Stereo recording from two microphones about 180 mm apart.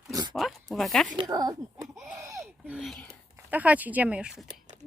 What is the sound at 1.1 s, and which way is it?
Speech, 20° right (ahead or behind).